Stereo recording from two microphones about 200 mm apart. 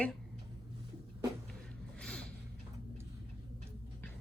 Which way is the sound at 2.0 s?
5° left (ahead or behind).